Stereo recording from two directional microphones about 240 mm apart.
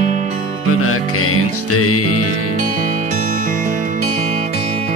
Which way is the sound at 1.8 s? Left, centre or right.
Left.